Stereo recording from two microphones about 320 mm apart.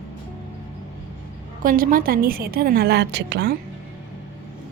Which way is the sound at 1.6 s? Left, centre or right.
Right.